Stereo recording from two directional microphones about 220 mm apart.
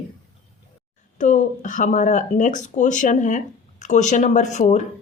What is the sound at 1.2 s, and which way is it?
A woman's voice, 35° left (ahead or behind).